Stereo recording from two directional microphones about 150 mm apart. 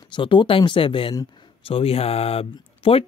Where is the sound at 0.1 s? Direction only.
30° left (ahead or behind).